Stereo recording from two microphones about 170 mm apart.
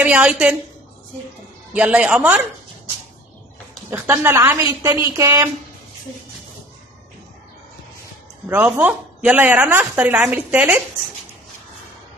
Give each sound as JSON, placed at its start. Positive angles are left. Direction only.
{"t": 0.0, "sound": "speech", "side_deg": -10}
{"t": 1.7, "sound": "speech", "side_deg": -5}
{"t": 3.9, "sound": "speech", "side_deg": -15}
{"t": 8.5, "sound": "speech", "side_deg": -10}